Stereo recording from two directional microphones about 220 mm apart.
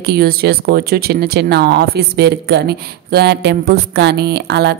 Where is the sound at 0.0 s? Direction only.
45° right (ahead or behind).